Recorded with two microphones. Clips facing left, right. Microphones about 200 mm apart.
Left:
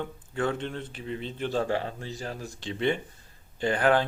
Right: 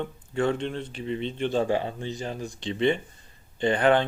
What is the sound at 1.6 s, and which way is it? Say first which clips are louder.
Speech: right 3 dB; 15° right (ahead or behind).